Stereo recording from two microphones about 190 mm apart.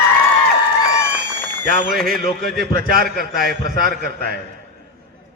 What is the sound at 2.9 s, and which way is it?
A man's voice, 55° right (ahead or behind).